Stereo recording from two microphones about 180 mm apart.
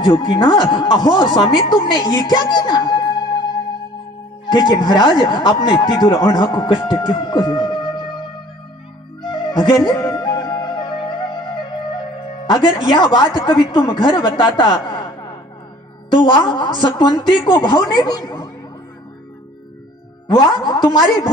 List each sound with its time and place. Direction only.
0.0 s speech: 25° left (ahead or behind)
4.5 s speech: 25° left (ahead or behind)
9.2 s music: 25° left (ahead or behind)
12.8 s speech: 25° left (ahead or behind)
20.2 s speech: 25° left (ahead or behind)